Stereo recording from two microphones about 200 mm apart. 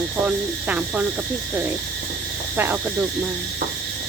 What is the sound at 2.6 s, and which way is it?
Speech, 10° right (ahead or behind).